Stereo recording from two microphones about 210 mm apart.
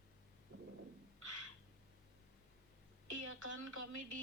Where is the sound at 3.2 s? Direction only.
90° right.